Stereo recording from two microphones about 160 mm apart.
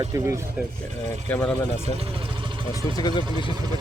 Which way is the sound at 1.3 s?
10° left (ahead or behind).